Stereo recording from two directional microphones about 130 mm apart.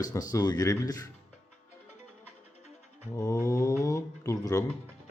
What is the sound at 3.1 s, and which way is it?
A man's voice, 25° left (ahead or behind).